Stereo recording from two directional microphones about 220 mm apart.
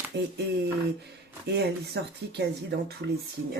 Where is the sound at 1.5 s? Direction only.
50° right (ahead or behind).